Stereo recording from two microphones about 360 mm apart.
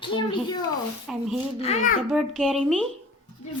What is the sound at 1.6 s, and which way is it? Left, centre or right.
Speech, centre.